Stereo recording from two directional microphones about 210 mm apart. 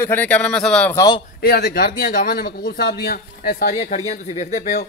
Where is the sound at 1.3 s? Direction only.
50° left (ahead or behind).